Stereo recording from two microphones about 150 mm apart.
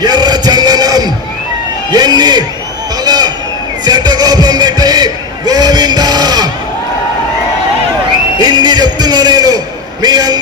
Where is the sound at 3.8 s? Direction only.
30° right (ahead or behind).